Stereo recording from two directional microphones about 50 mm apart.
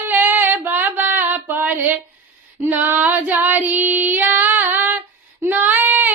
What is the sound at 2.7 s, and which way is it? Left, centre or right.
Child singing, right.